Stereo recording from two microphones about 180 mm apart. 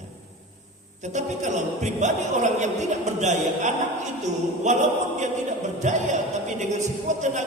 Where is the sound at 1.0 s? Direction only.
40° right (ahead or behind).